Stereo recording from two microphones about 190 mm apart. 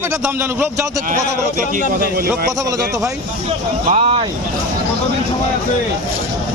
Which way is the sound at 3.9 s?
30° right (ahead or behind).